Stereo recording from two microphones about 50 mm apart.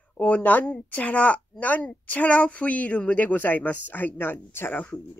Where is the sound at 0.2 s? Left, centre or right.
Left.